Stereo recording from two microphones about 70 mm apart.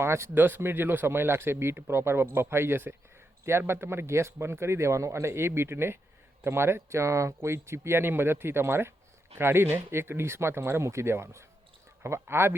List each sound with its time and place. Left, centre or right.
0.0 s speech: right